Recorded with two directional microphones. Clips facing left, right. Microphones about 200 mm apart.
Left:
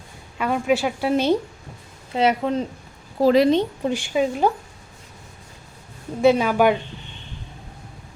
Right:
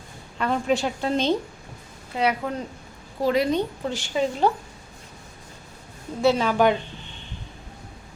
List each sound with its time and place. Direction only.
0.3 s a woman's voice: 10° left (ahead or behind)
2.1 s a woman's voice: 25° left (ahead or behind)
3.8 s a woman's voice: 15° left (ahead or behind)
6.2 s a woman's voice: 10° left (ahead or behind)